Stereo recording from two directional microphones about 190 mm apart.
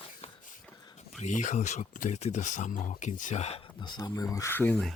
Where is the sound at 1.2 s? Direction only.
40° left (ahead or behind).